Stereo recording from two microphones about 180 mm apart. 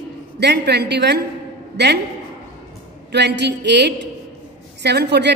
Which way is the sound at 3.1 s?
70° right (ahead or behind).